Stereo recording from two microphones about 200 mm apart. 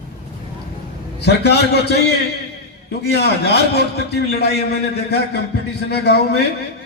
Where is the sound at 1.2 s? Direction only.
55° left (ahead or behind).